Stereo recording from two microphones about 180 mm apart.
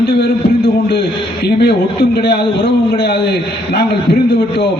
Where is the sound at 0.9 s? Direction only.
60° left (ahead or behind).